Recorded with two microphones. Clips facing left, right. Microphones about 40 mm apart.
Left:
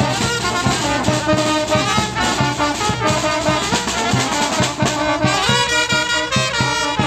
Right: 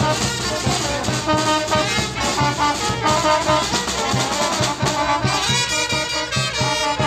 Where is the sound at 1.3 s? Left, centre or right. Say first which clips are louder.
Right 1 dB; left.